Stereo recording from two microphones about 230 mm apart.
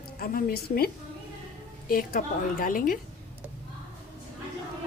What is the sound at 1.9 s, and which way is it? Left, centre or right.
Speech, left.